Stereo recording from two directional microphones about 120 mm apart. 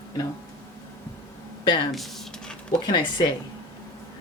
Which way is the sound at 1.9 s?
5° left (ahead or behind).